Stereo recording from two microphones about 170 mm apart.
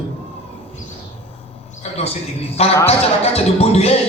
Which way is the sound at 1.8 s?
40° left (ahead or behind).